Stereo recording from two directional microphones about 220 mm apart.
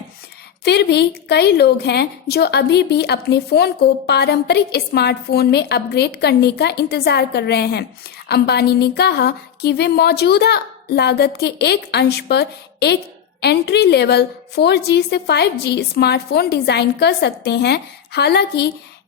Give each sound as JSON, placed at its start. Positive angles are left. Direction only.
{"t": 0.6, "sound": "a woman's voice", "side_deg": 50}